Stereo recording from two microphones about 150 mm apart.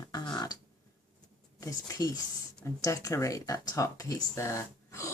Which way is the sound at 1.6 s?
20° left (ahead or behind).